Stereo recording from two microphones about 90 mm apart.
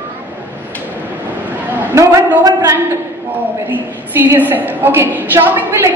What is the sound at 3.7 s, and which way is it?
A woman's voice, 20° right (ahead or behind).